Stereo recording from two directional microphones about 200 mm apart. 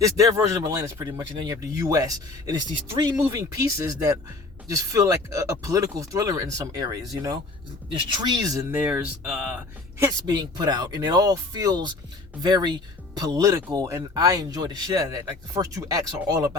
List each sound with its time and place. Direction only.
0.0 s speech: 15° right (ahead or behind)
10.0 s speech: 20° right (ahead or behind)